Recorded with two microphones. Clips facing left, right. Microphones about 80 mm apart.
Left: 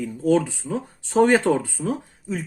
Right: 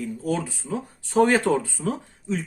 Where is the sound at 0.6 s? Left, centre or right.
Centre.